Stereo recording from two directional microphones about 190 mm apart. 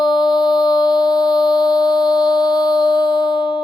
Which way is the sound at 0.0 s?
20° left (ahead or behind).